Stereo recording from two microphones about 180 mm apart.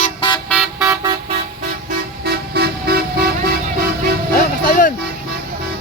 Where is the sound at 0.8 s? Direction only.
20° right (ahead or behind).